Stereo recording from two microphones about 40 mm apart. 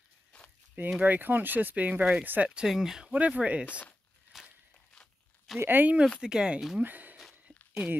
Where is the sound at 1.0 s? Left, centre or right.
Right.